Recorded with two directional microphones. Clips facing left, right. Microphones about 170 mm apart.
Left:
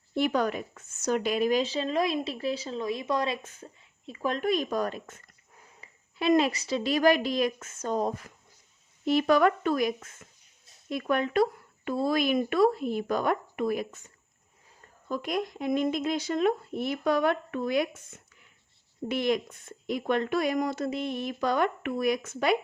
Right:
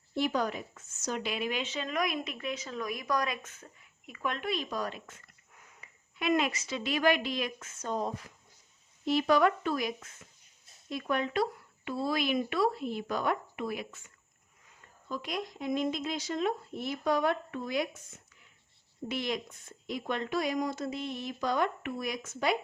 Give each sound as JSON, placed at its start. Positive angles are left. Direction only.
{"t": 0.1, "sound": "speech", "side_deg": 60}
{"t": 15.1, "sound": "speech", "side_deg": 50}
{"t": 19.0, "sound": "speech", "side_deg": 55}